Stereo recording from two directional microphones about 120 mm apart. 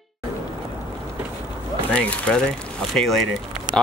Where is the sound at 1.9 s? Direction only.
10° left (ahead or behind).